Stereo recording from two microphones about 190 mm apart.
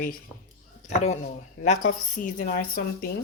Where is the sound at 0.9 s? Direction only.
35° left (ahead or behind).